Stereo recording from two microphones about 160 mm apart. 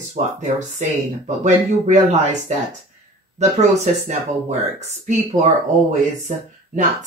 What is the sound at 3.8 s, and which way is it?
Speech, 45° right (ahead or behind).